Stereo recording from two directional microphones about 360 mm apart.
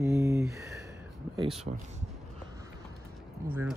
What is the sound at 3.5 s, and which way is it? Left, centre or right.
Speech, centre.